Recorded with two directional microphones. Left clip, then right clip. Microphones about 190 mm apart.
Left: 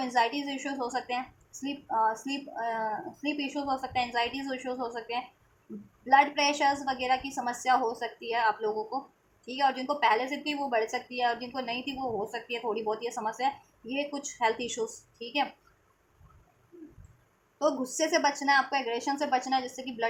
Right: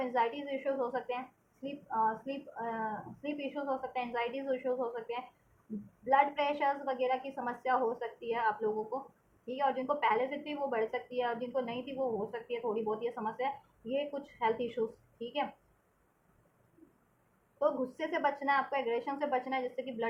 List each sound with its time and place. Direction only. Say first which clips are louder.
0.0 s a woman's voice: left 5 dB; 30° left (ahead or behind)
17.6 s a woman's voice: left 4 dB; 25° left (ahead or behind)